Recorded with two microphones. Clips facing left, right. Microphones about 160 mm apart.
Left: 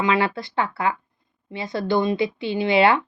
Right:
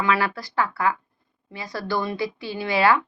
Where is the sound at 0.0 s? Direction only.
20° left (ahead or behind).